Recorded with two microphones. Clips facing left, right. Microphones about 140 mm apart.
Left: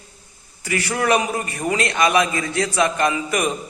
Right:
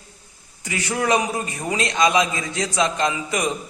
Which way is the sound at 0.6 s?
20° right (ahead or behind).